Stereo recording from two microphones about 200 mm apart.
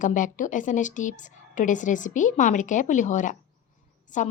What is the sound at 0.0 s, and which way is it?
Speech, 40° left (ahead or behind).